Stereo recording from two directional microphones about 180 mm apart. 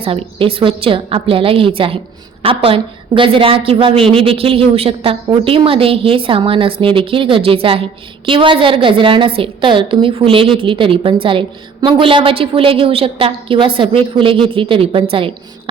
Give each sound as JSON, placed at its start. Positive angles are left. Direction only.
{"t": 0.0, "sound": "a woman's voice", "side_deg": -30}